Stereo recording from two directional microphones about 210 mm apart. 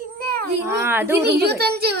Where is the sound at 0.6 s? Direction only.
10° right (ahead or behind).